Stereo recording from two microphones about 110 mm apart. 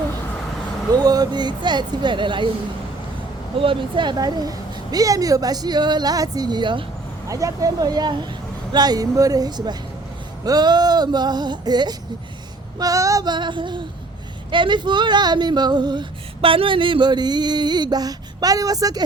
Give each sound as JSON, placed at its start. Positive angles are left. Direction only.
{"t": 0.9, "sound": "speech", "side_deg": -35}
{"t": 3.6, "sound": "female singing", "side_deg": -50}
{"t": 7.3, "sound": "female singing", "side_deg": -30}